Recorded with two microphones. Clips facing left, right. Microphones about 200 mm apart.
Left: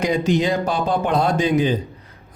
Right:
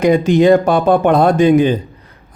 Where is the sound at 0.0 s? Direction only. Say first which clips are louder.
Right 8 dB; 55° right (ahead or behind).